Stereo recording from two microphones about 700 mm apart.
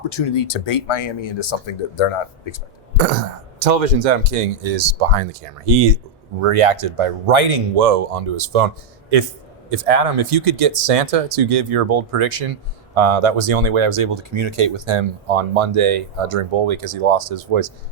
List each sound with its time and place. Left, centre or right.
0.1 s speech: left
3.6 s speech: right
9.7 s speech: right